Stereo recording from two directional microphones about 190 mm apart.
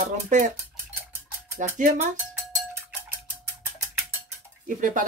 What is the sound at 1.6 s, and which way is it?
Speech, 40° right (ahead or behind).